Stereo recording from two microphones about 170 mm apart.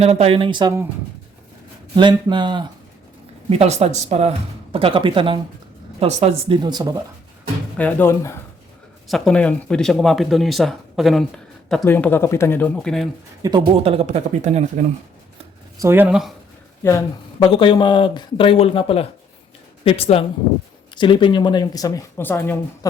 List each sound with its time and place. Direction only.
0.0 s speech: 40° right (ahead or behind)
2.0 s speech: 25° right (ahead or behind)
3.5 s speech: 40° right (ahead or behind)
6.6 s speech: 25° right (ahead or behind)
7.8 s speech: 10° left (ahead or behind)
9.0 s speech: centre (ahead or behind)
11.9 s speech: 10° left (ahead or behind)
13.4 s speech: 20° right (ahead or behind)
13.7 s speech: 35° right (ahead or behind)
15.8 s speech: 10° right (ahead or behind)
16.8 s speech: 15° left (ahead or behind)
17.4 s speech: 30° left (ahead or behind)
22.2 s speech: 10° left (ahead or behind)